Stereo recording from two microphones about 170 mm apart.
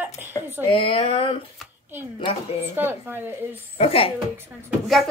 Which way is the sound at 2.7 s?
10° right (ahead or behind).